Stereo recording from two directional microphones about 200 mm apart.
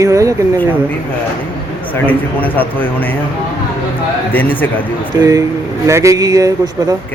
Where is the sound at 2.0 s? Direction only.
10° left (ahead or behind).